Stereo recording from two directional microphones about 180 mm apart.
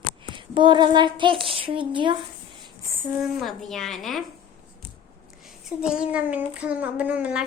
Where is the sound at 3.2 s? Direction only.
Centre (ahead or behind).